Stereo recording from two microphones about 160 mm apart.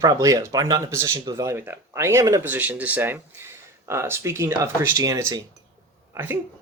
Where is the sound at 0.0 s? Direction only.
20° right (ahead or behind).